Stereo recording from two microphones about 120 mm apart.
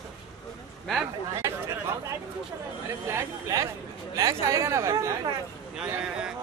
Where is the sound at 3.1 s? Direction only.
25° right (ahead or behind).